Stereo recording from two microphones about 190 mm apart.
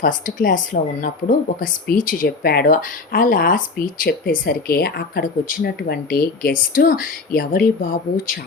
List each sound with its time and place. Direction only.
0.0 s speech: 45° left (ahead or behind)